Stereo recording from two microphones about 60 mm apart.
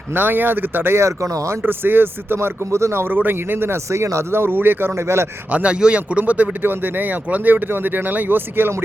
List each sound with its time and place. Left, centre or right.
0.1 s speech: right
0.9 s speech: right
1.6 s speech: right
4.9 s speech: right
5.5 s speech: right